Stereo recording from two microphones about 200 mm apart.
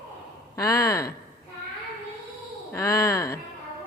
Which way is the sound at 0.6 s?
15° left (ahead or behind).